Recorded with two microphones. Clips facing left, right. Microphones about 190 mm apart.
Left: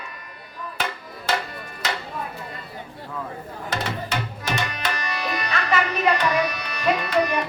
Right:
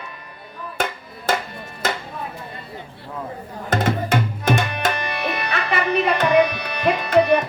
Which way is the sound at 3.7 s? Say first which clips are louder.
Right 8 dB; 50° right (ahead or behind).